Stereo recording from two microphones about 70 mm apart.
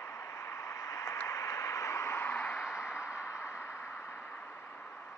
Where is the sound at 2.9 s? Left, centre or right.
Centre.